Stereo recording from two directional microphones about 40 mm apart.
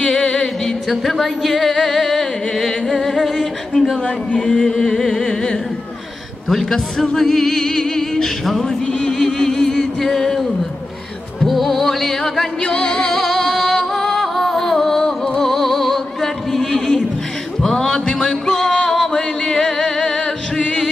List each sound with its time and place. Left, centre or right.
0.0 s music: centre
0.8 s a woman's voice: centre
4.4 s music: centre
6.5 s a woman's voice: centre
7.2 s music: centre
8.8 s chant: centre
10.0 s music: centre
11.4 s a woman's voice: centre
12.6 s music: left
13.1 s music: centre